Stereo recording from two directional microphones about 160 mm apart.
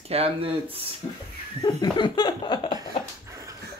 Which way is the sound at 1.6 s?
25° left (ahead or behind).